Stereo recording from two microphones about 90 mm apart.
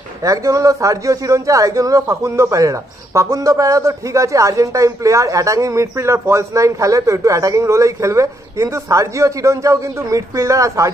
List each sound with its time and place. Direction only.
0.2 s a man's voice: 40° right (ahead or behind)